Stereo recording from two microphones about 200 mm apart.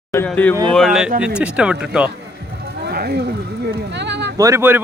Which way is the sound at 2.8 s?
50° right (ahead or behind).